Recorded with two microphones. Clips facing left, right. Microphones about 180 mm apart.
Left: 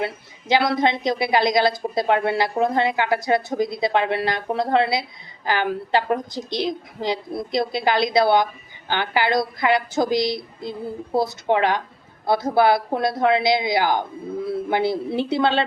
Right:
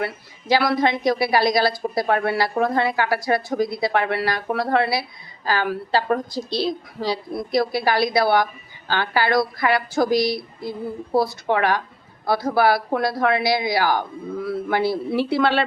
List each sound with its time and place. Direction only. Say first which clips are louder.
0.0 s a woman's voice: even; 20° left (ahead or behind)